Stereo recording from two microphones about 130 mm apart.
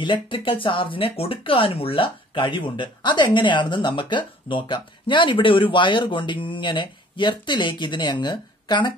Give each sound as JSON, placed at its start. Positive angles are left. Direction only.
{"t": 0.0, "sound": "speech", "side_deg": 40}